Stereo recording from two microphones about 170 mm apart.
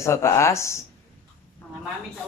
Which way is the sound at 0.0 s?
15° left (ahead or behind).